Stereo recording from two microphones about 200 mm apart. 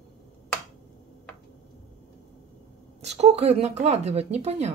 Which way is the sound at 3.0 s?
30° right (ahead or behind).